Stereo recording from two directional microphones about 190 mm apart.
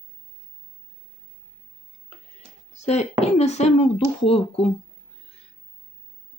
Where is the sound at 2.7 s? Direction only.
35° left (ahead or behind).